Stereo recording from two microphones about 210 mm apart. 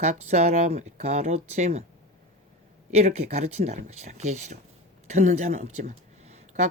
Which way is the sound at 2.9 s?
30° right (ahead or behind).